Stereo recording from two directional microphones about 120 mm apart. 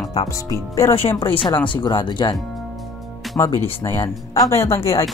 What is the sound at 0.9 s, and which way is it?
Speech, 50° left (ahead or behind).